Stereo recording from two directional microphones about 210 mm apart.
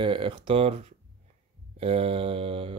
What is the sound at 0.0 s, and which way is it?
Speech, 25° right (ahead or behind).